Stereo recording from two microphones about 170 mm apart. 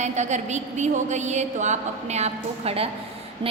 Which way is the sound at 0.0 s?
45° right (ahead or behind).